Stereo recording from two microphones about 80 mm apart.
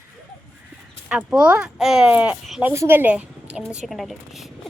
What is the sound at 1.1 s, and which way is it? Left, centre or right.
Speech, centre.